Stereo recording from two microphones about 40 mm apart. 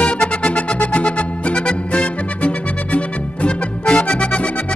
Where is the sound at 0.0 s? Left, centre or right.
Left.